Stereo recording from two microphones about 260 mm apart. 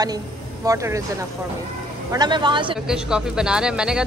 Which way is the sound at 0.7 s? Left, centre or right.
Centre.